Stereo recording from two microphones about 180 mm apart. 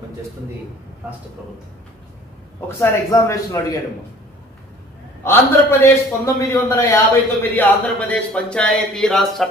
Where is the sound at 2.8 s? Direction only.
15° left (ahead or behind).